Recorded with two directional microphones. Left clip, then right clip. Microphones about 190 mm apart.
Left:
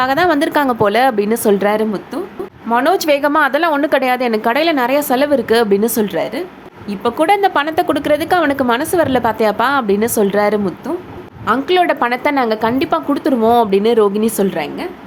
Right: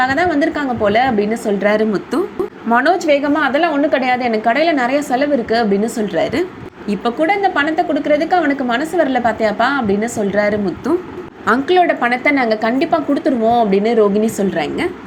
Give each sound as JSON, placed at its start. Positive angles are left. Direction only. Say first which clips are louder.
{"t": 0.0, "sound": "a woman's voice", "louder": "left 1 dB", "side_deg": 20}
{"t": 1.6, "sound": "a woman's voice", "louder": "right 1 dB", "side_deg": 5}
{"t": 2.9, "sound": "a woman's voice", "louder": "left 1 dB", "side_deg": 25}
{"t": 7.2, "sound": "a woman's voice", "louder": "left 2 dB", "side_deg": 20}
{"t": 11.7, "sound": "speech", "louder": "even", "side_deg": 20}